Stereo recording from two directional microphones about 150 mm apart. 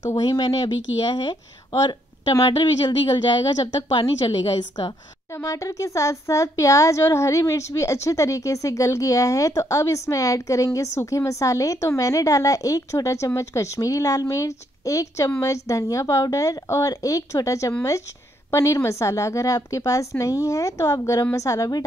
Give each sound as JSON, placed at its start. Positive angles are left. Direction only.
{"t": 0.1, "sound": "speech", "side_deg": 25}